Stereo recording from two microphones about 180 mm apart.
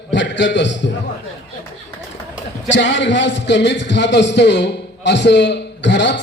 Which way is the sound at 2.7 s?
85° left.